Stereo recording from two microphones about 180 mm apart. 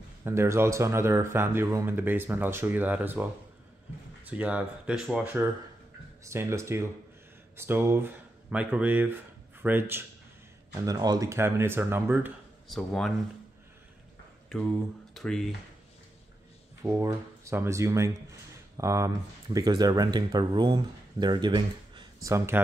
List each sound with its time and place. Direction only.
0.2 s speech: 15° right (ahead or behind)
4.3 s speech: 5° right (ahead or behind)
12.6 s speech: centre (ahead or behind)
14.5 s speech: centre (ahead or behind)
16.8 s speech: 15° right (ahead or behind)